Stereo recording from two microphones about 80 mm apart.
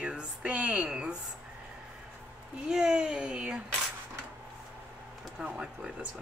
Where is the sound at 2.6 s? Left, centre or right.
Centre.